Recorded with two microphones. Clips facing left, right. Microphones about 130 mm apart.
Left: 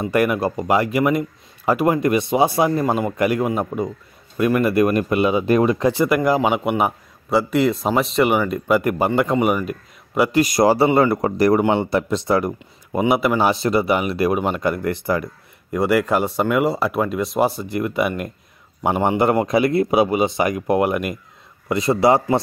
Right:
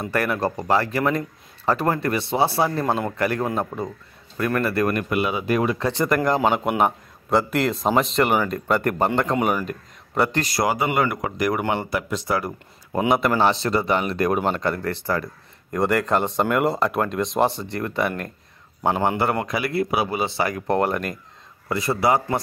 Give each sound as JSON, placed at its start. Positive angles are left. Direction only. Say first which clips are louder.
{"t": 0.0, "sound": "a man's voice", "louder": "left 4 dB", "side_deg": 15}
{"t": 5.9, "sound": "a man's voice", "louder": "left 4 dB", "side_deg": 10}
{"t": 10.6, "sound": "speech", "louder": "left 6 dB", "side_deg": 30}
{"t": 13.1, "sound": "a man's voice", "louder": "left 1 dB", "side_deg": 5}
{"t": 21.6, "sound": "speech", "louder": "left 5 dB", "side_deg": 20}